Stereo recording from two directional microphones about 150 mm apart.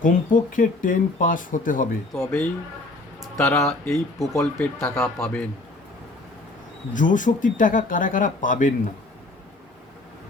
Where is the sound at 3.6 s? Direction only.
5° left (ahead or behind).